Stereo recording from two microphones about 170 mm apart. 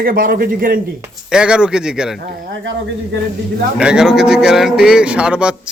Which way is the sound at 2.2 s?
90° right.